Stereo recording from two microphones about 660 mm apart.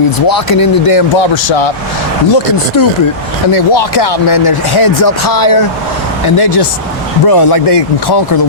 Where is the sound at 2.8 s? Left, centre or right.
Left.